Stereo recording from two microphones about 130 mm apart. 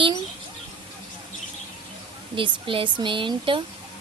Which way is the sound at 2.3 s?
40° right (ahead or behind).